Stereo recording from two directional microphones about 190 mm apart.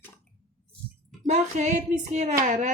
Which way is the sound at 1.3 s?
35° right (ahead or behind).